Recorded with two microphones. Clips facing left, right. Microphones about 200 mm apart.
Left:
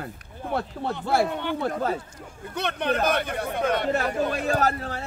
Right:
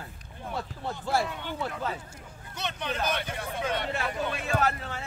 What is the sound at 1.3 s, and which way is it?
Speech, 65° left (ahead or behind).